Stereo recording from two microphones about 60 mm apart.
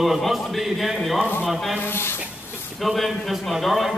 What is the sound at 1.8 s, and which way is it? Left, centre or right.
Speech, left.